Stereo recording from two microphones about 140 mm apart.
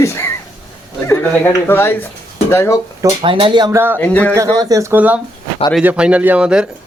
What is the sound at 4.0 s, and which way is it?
Speech, 10° left (ahead or behind).